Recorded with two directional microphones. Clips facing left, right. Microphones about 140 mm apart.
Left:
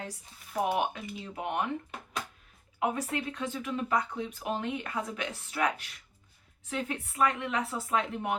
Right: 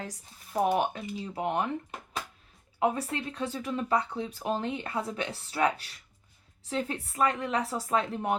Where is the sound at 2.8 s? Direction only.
30° right (ahead or behind).